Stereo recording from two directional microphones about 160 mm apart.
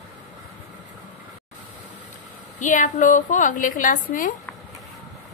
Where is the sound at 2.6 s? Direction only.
55° left (ahead or behind).